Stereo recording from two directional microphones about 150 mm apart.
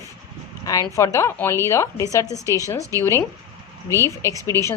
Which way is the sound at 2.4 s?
20° right (ahead or behind).